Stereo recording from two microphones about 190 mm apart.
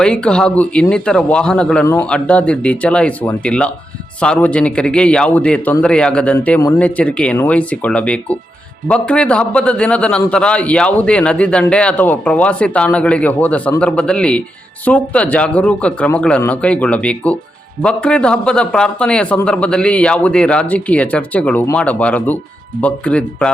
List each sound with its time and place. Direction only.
0.0 s a man's voice: 5° left (ahead or behind)